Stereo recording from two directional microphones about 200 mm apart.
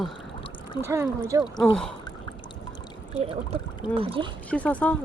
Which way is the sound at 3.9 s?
25° right (ahead or behind).